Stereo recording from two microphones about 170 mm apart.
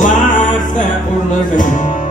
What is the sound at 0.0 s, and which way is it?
Music, 50° left (ahead or behind).